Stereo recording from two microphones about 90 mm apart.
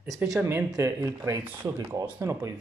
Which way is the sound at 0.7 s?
40° right (ahead or behind).